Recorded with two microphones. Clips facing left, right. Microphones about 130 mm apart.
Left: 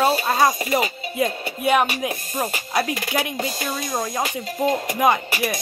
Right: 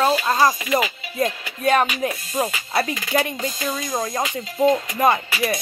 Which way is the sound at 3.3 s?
70° left (ahead or behind).